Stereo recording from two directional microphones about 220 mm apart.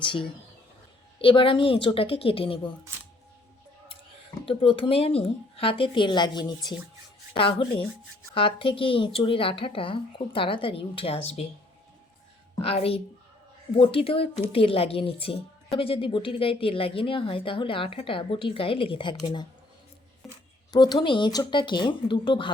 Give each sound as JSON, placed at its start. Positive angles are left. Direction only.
{"t": 0.0, "sound": "a woman's voice", "side_deg": 25}
{"t": 4.4, "sound": "a woman's voice", "side_deg": 25}
{"t": 8.3, "sound": "a woman's voice", "side_deg": 25}
{"t": 12.6, "sound": "a woman's voice", "side_deg": 25}
{"t": 20.7, "sound": "a woman's voice", "side_deg": 20}